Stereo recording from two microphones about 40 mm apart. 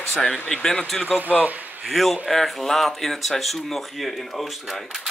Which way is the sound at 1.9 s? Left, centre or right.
Centre.